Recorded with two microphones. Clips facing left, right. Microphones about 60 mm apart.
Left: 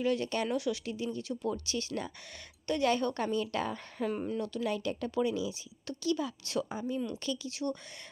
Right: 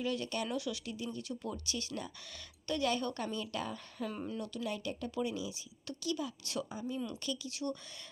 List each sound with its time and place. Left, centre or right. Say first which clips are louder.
0.0 s speech: left 5 dB; left
0.9 s a woman's voice: left 5 dB; left
4.1 s speech: left 6 dB; left
4.6 s speech: left 4 dB; left
5.9 s a woman's voice: left 5 dB; left
7.6 s speech: left 3 dB; left